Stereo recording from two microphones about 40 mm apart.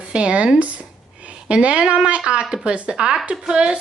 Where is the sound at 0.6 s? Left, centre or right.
Right.